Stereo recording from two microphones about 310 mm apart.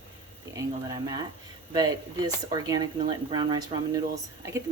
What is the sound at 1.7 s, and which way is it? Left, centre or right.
Speech, centre.